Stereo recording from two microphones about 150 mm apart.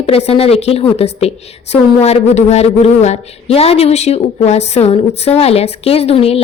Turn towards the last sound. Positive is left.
turn(degrees=40)  # may be behind; listen again after turning